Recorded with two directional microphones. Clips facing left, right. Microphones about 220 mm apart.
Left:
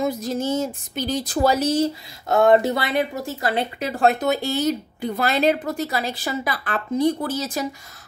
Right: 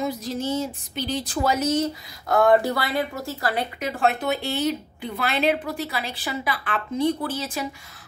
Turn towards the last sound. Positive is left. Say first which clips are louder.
# left 2 dB
turn(degrees=40)  # may be behind; listen again after turning